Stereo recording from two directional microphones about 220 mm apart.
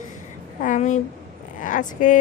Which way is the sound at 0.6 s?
35° left (ahead or behind).